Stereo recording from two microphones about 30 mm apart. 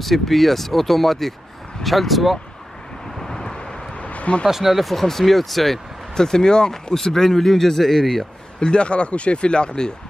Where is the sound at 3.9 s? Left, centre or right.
Left.